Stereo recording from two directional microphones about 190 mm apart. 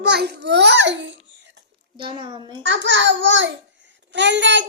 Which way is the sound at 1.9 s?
25° right (ahead or behind).